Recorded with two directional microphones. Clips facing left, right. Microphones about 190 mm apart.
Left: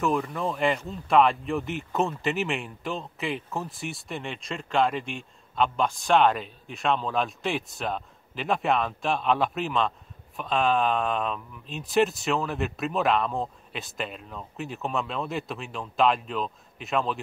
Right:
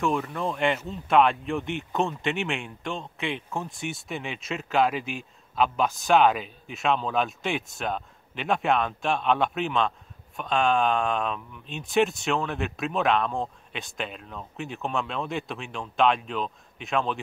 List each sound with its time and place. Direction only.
0.0 s speech: centre (ahead or behind)